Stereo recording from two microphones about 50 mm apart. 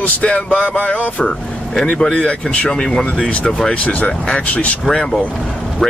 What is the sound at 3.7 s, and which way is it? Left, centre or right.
Speech, left.